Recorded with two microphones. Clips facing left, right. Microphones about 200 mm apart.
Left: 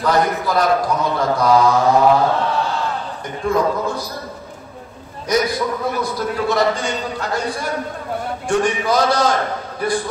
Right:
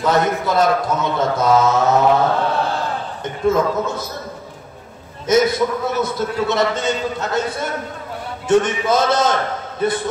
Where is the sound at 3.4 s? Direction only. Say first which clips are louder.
Right 2 dB; 20° right (ahead or behind).